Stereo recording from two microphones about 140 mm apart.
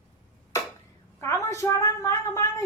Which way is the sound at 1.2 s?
20° left (ahead or behind).